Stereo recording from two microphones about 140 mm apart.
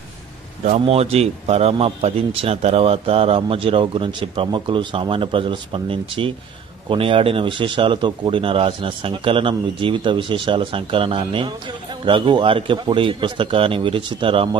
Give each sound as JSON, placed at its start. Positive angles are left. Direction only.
{"t": 0.7, "sound": "speech", "side_deg": -45}